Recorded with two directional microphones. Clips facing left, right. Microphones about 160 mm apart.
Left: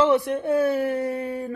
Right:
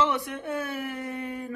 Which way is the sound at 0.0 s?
30° left (ahead or behind).